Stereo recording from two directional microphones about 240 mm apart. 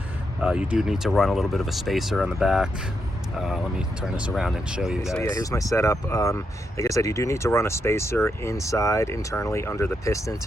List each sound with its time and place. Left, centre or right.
0.4 s speech: centre
5.2 s speech: centre